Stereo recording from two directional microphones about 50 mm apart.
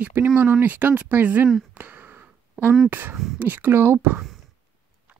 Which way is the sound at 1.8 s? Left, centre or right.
Right.